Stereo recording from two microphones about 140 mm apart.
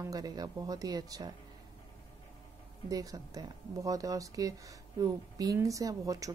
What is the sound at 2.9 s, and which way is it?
Speech, 25° right (ahead or behind).